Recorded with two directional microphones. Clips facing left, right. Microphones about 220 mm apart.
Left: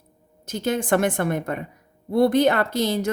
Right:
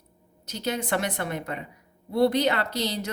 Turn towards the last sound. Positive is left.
turn(degrees=50)  # may be behind; listen again after turning